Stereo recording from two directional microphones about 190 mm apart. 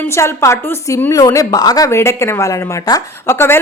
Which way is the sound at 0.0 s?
15° left (ahead or behind).